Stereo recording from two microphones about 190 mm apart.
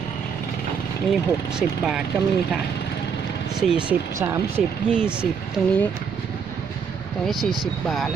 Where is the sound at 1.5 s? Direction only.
5° right (ahead or behind).